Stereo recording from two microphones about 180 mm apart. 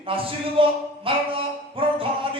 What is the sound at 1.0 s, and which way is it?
Music, 30° right (ahead or behind).